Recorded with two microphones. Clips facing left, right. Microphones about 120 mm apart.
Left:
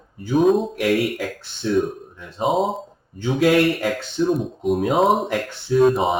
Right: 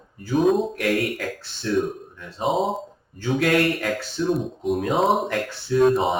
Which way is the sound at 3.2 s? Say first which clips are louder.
Left 4 dB; 15° left (ahead or behind).